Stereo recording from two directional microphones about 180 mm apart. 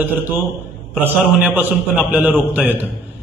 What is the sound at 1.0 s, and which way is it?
A man's voice, 10° right (ahead or behind).